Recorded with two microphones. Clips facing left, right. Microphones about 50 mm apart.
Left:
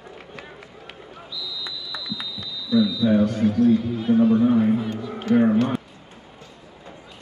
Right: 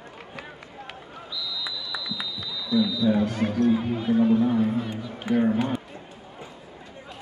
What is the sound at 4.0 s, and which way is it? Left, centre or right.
Speech, centre.